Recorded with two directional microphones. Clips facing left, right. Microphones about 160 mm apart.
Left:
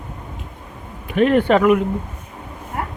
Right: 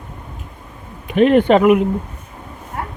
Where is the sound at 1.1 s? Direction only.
20° right (ahead or behind).